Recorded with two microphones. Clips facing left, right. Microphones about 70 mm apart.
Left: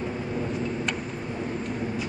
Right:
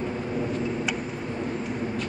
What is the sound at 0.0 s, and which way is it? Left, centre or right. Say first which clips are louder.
Vehicle: right 1 dB; centre.